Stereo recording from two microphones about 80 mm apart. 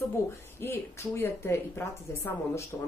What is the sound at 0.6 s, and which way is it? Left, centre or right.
Speech, left.